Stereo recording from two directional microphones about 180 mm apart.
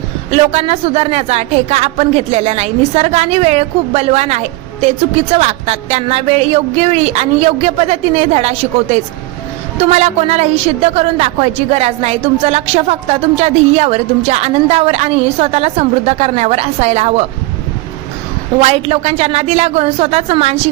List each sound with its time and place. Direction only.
0.3 s a woman's voice: 35° right (ahead or behind)
18.6 s a woman's voice: 35° right (ahead or behind)